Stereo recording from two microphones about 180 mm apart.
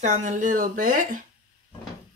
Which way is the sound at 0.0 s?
40° right (ahead or behind).